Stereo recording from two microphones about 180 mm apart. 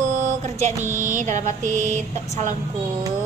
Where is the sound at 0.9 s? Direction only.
45° right (ahead or behind).